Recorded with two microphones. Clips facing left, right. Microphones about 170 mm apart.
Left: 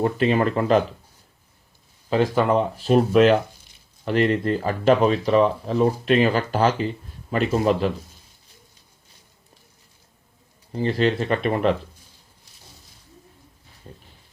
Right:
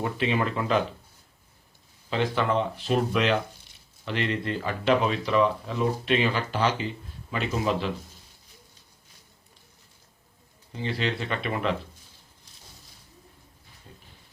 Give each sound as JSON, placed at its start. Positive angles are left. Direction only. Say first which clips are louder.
{"t": 0.0, "sound": "speech", "louder": "left 7 dB", "side_deg": 45}
{"t": 2.0, "sound": "speech", "louder": "left 6 dB", "side_deg": 40}
{"t": 10.7, "sound": "speech", "louder": "left 8 dB", "side_deg": 40}
{"t": 13.9, "sound": "pig", "louder": "left 7 dB", "side_deg": 40}